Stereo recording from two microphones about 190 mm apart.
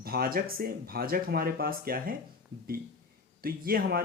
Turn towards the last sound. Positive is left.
turn(degrees=-50)  # may be behind; listen again after turning